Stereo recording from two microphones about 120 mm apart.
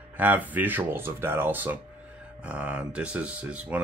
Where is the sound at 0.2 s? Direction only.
15° right (ahead or behind).